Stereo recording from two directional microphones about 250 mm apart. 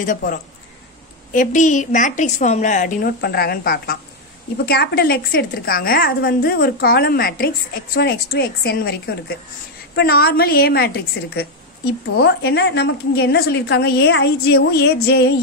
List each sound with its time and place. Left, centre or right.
0.0 s a woman's voice: left